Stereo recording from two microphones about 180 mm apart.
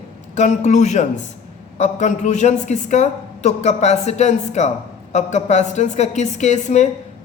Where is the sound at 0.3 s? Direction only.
40° left (ahead or behind).